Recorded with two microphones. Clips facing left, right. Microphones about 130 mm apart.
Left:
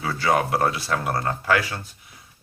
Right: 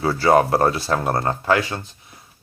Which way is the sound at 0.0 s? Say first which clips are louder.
Right 6 dB; 35° right (ahead or behind).